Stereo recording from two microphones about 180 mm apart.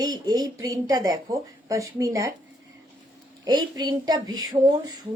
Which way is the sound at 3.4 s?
25° right (ahead or behind).